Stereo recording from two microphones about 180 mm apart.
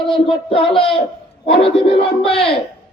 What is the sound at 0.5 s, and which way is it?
Music, 30° left (ahead or behind).